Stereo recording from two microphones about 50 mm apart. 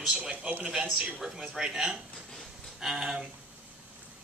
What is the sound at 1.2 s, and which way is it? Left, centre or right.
Speech, centre.